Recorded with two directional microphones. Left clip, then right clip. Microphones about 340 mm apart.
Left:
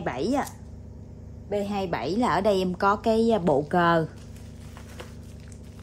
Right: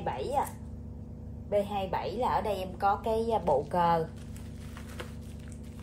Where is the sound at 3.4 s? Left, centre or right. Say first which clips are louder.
Left 4 dB; left.